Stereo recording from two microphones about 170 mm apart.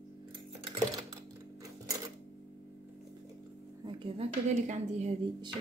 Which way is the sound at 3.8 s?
30° right (ahead or behind).